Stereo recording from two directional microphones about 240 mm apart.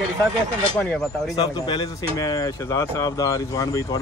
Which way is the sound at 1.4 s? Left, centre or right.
Centre.